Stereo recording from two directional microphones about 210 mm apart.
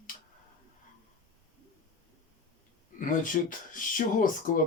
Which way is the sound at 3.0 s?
40° left (ahead or behind).